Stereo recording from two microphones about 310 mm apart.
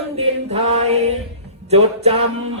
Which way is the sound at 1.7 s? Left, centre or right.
Right.